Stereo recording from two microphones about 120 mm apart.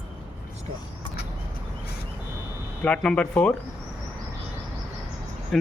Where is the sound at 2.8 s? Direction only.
5° left (ahead or behind).